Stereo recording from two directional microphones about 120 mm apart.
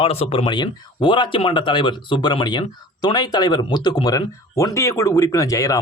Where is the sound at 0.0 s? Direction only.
55° left (ahead or behind).